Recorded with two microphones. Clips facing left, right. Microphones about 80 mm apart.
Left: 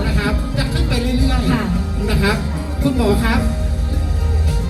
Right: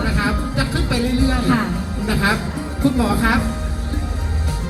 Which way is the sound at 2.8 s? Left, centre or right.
Right.